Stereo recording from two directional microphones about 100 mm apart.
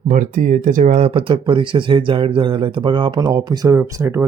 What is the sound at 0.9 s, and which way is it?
Speech, 70° right (ahead or behind).